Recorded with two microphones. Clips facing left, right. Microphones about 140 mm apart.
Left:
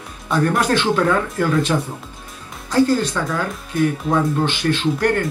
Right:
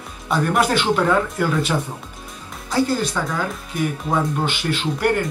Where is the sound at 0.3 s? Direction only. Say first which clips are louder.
Left 1 dB; 15° right (ahead or behind).